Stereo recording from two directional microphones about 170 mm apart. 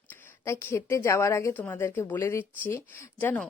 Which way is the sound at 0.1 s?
15° left (ahead or behind).